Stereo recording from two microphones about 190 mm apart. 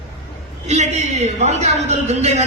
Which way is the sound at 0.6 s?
35° right (ahead or behind).